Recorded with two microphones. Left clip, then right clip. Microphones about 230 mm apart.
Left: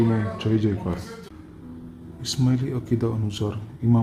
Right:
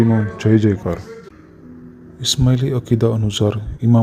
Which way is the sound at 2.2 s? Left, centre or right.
Right.